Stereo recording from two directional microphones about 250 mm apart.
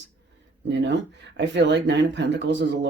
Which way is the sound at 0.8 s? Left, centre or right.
Right.